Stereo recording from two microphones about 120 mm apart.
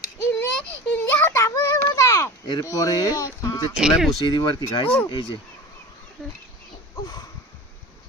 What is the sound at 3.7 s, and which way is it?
Speech, 5° right (ahead or behind).